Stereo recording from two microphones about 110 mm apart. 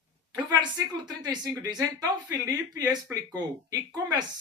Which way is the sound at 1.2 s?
40° right (ahead or behind).